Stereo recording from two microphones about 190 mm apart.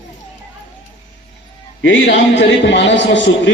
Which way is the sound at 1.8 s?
70° left (ahead or behind).